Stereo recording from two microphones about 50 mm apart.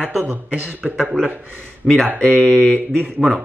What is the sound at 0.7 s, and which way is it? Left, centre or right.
Speech, right.